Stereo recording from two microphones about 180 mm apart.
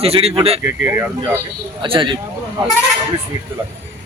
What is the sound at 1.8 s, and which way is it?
Speech, 30° right (ahead or behind).